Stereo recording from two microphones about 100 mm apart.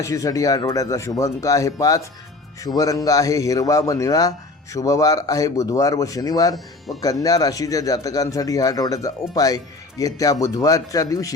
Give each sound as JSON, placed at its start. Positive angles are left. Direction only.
{"t": 0.0, "sound": "a man's voice", "side_deg": 35}